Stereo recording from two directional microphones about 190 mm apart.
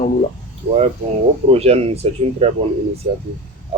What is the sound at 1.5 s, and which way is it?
Speech, 30° right (ahead or behind).